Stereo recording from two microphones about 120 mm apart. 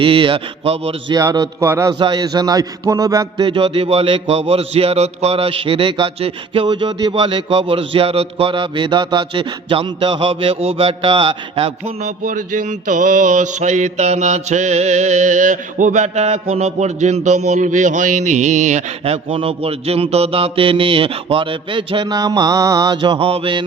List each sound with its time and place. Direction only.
0.0 s a man's voice: 45° right (ahead or behind)
1.1 s a man's voice: 30° right (ahead or behind)
1.9 s a sound: 40° right (ahead or behind)
3.3 s a man's voice: 45° right (ahead or behind)
12.0 s mantra: 90° right
19.0 s a man's voice: 55° right (ahead or behind)